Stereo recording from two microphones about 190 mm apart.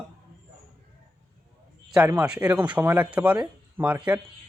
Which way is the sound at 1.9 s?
10° right (ahead or behind).